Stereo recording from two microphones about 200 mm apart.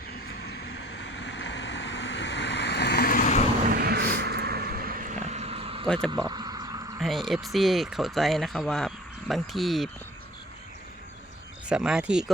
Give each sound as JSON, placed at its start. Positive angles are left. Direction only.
{"t": 0.5, "sound": "vehicle", "side_deg": 55}
{"t": 3.7, "sound": "vehicle", "side_deg": -55}
{"t": 6.1, "sound": "a sound", "side_deg": -20}
{"t": 7.0, "sound": "speech", "side_deg": 0}
{"t": 11.7, "sound": "speech", "side_deg": -5}